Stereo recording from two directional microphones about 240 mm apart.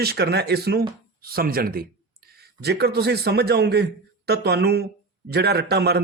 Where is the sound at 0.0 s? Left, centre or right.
Right.